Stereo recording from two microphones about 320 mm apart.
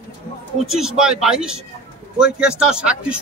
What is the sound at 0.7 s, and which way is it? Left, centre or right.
Speech, centre.